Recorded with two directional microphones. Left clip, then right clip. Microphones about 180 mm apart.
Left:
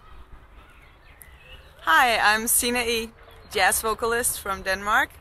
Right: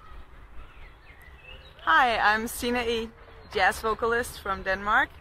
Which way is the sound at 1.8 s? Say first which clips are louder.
Left 3 dB; 10° left (ahead or behind).